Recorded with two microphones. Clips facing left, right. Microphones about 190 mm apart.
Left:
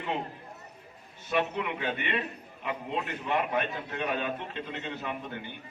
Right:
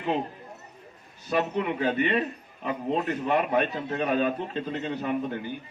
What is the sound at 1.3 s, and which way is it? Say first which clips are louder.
A man's voice: right 3 dB; 35° right (ahead or behind).